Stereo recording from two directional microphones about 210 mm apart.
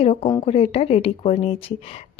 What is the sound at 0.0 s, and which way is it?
A woman's voice, 30° left (ahead or behind).